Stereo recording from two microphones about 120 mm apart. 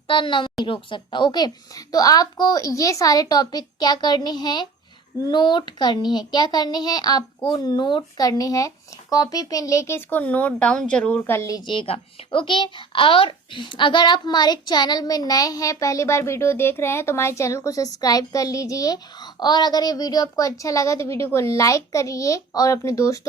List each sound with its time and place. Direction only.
0.1 s a woman's voice: 40° left (ahead or behind)
8.3 s speech: 30° left (ahead or behind)
11.6 s speech: 45° left (ahead or behind); by 23.2 s 25° left (ahead or behind)